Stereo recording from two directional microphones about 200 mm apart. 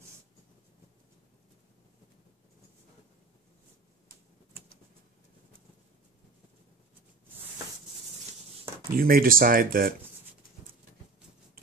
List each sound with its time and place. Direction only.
8.9 s speech: 45° right (ahead or behind)